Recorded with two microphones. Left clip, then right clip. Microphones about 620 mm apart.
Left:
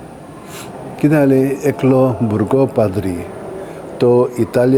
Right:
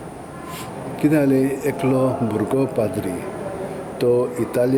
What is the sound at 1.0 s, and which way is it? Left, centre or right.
Speech, left.